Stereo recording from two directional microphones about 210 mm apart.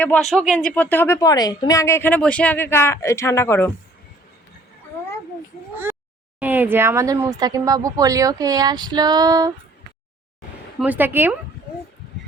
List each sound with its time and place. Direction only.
0.0 s speech: 5° left (ahead or behind)
6.4 s speech: 10° right (ahead or behind)
10.8 s speech: 10° right (ahead or behind)